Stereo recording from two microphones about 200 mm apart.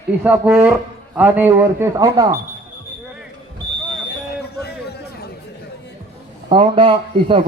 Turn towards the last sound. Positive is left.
turn(degrees=-25)  # may be behind; listen again after turning